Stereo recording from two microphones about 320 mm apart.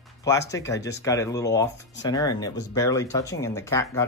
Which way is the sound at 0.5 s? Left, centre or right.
Centre.